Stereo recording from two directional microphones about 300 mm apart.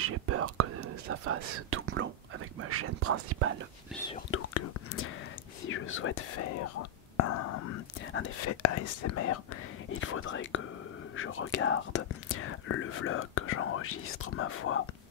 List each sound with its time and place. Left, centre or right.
0.0 s whispering: right
2.6 s speech: right
3.9 s speech: centre
4.3 s speech: left
6.5 s speech: left